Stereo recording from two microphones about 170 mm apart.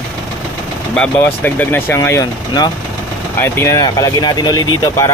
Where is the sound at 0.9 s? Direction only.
10° left (ahead or behind).